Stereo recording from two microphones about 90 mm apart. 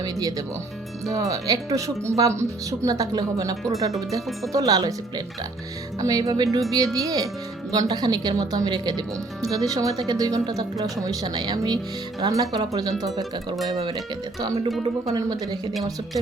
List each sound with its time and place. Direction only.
0.0 s speech: 45° right (ahead or behind)
15.0 s speech: 45° right (ahead or behind)